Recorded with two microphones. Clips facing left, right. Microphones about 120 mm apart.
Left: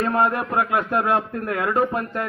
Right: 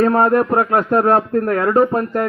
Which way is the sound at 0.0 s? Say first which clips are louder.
Right 7 dB; 40° right (ahead or behind).